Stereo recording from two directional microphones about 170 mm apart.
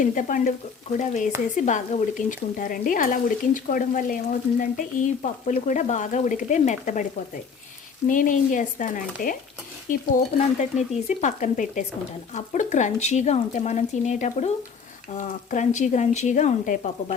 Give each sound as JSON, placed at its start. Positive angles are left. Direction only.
{"t": 0.0, "sound": "speech", "side_deg": 50}
{"t": 8.0, "sound": "speech", "side_deg": 50}